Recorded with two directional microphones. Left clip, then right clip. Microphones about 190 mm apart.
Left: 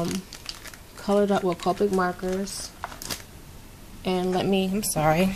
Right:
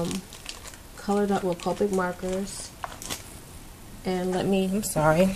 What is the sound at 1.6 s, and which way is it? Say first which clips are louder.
Speech: left 3 dB; 20° left (ahead or behind).